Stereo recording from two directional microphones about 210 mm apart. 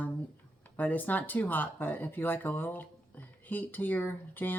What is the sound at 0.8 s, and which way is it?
Speech, 10° left (ahead or behind).